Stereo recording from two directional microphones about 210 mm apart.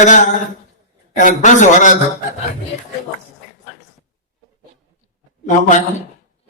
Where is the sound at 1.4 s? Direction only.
35° left (ahead or behind).